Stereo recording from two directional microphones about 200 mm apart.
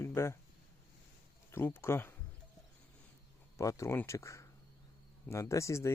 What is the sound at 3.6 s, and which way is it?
Speech, 15° left (ahead or behind).